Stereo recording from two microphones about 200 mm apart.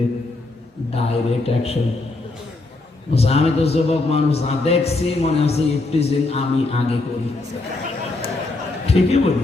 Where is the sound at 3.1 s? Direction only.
30° left (ahead or behind).